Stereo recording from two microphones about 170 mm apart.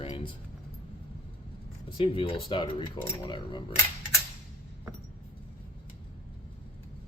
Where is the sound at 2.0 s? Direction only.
35° left (ahead or behind).